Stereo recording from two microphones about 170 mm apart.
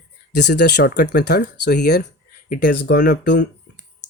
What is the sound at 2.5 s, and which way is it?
Speech, 85° left.